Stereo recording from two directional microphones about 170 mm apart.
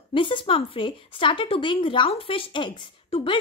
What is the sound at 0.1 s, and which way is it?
Speech, 30° left (ahead or behind).